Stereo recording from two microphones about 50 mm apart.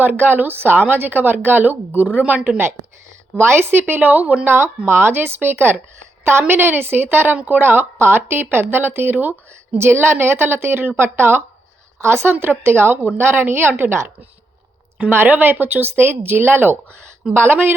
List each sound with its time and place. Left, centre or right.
0.0 s a woman's voice: right
3.3 s a woman's voice: right
4.4 s a woman's voice: right
9.7 s a woman's voice: right
15.1 s a woman's voice: right